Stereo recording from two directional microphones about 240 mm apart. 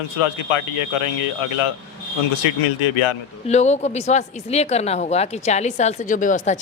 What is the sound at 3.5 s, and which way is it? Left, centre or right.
Speech, left.